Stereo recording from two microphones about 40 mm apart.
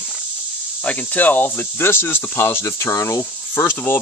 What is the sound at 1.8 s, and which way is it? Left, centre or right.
Speech, left.